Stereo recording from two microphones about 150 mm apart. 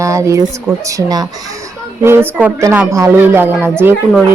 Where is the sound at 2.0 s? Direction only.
15° right (ahead or behind).